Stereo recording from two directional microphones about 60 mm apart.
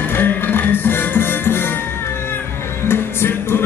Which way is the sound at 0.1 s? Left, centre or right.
Left.